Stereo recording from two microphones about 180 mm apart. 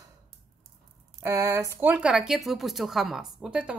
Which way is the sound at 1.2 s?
15° right (ahead or behind).